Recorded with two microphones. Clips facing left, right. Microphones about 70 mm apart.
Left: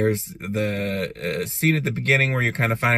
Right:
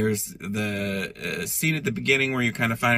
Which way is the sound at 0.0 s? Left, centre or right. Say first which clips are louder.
Left 3 dB; left.